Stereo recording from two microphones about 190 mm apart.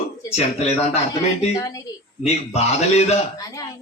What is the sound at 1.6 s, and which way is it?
Speech, 20° left (ahead or behind).